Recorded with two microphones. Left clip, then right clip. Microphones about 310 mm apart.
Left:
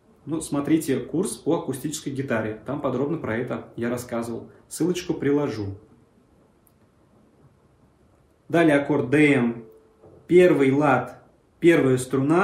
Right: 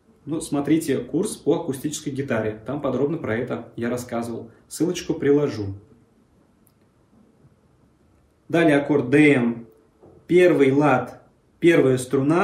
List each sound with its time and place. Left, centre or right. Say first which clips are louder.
0.3 s speech: right 1 dB; centre
8.5 s a man's voice: right 1 dB; centre